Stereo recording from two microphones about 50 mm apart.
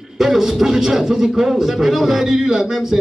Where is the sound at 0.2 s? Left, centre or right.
Centre.